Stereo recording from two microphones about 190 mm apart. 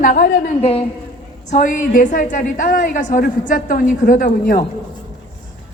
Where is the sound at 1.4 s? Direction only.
45° left (ahead or behind).